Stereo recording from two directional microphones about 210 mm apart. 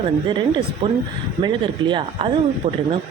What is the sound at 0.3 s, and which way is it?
Speech, 25° right (ahead or behind).